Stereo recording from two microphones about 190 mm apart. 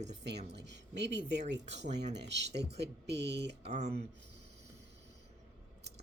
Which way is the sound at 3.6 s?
35° right (ahead or behind).